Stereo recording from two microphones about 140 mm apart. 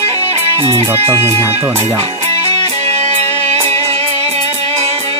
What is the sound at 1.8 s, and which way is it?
Music, 45° right (ahead or behind).